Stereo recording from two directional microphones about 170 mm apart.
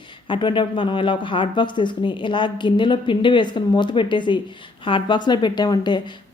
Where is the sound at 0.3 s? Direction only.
30° left (ahead or behind).